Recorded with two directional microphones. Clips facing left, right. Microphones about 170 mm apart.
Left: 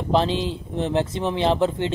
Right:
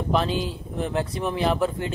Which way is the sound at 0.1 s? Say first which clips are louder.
Left 4 dB; 30° left (ahead or behind).